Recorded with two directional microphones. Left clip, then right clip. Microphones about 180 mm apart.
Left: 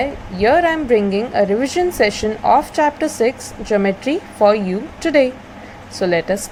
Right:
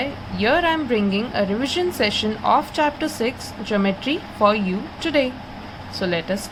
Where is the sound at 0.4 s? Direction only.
15° left (ahead or behind).